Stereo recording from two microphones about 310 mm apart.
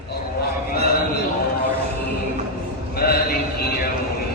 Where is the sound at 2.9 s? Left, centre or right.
Left.